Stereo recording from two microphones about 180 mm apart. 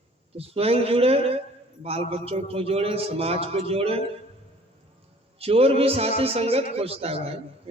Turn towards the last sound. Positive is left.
turn(degrees=-35)  # may be behind; listen again after turning